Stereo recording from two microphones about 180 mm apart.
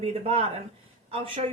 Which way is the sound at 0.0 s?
35° right (ahead or behind).